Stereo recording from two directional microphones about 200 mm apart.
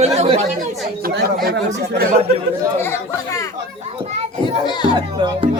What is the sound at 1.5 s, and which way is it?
Speech, 50° right (ahead or behind).